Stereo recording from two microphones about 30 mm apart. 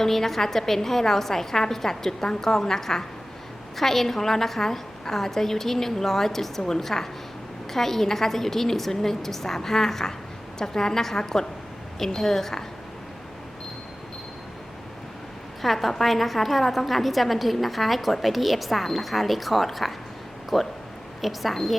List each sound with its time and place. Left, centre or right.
0.0 s a woman's voice: centre
15.6 s a woman's voice: centre